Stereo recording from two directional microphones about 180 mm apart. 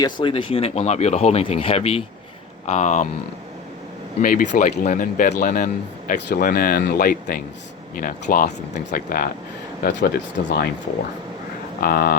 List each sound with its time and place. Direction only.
0.0 s speech: 25° left (ahead or behind)
4.2 s speech: 50° left (ahead or behind)
9.8 s speech: 75° left (ahead or behind)
10.4 s speech: 55° left (ahead or behind)
11.8 s speech: 55° left (ahead or behind)